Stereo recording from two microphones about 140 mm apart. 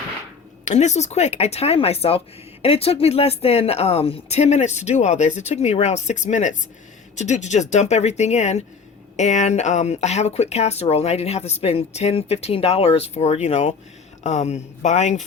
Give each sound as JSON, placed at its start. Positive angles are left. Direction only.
{"t": 0.6, "sound": "speech", "side_deg": 55}